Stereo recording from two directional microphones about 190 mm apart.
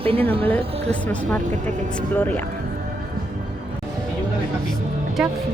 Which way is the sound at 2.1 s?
10° left (ahead or behind).